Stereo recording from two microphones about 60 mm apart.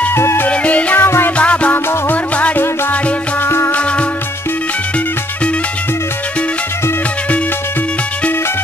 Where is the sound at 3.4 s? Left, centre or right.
Left.